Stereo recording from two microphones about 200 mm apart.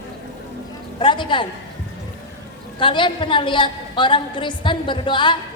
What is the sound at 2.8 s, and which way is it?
A woman's voice, 25° left (ahead or behind).